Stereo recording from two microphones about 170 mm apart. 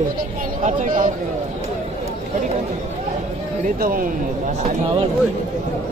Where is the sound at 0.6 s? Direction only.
50° right (ahead or behind).